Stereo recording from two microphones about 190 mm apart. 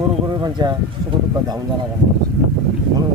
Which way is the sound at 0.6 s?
25° right (ahead or behind).